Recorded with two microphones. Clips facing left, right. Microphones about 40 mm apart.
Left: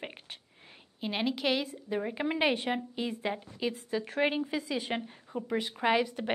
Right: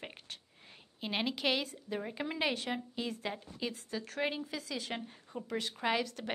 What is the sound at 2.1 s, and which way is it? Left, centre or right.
A woman's voice, left.